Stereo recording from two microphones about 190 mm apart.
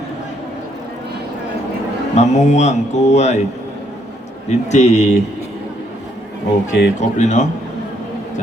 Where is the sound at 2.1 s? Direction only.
35° left (ahead or behind).